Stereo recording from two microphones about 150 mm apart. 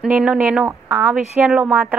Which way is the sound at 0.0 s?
5° right (ahead or behind).